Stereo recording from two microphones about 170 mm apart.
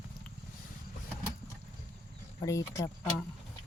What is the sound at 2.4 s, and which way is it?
Speech, 20° left (ahead or behind).